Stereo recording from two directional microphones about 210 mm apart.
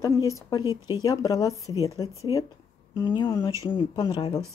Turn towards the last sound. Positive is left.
turn(degrees=20)  # may be behind; listen again after turning